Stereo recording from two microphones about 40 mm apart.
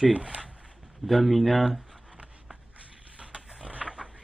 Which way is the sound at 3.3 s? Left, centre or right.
Centre.